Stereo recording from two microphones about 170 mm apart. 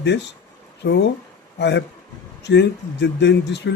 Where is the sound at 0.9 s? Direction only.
90° left.